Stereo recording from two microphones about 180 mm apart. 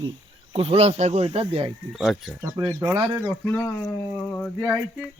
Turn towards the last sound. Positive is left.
turn(degrees=0)  # may be behind; listen again after turning